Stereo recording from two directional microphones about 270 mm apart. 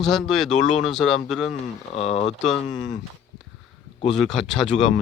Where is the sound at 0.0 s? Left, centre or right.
Centre.